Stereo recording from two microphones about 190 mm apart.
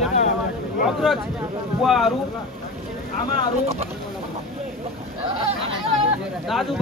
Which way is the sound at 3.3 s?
35° right (ahead or behind).